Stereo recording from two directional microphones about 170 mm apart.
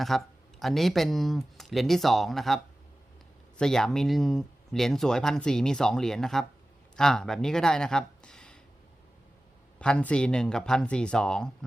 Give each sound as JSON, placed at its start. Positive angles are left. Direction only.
{"t": 0.1, "sound": "speech", "side_deg": 0}
{"t": 3.6, "sound": "speech", "side_deg": 5}
{"t": 9.7, "sound": "speech", "side_deg": 5}